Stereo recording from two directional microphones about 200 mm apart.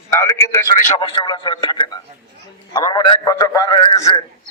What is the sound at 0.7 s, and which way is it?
Speech, 40° left (ahead or behind).